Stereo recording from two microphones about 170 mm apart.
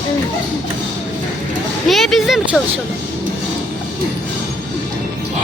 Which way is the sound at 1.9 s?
Centre (ahead or behind).